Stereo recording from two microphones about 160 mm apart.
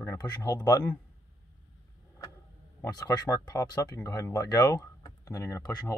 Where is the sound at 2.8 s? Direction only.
20° left (ahead or behind).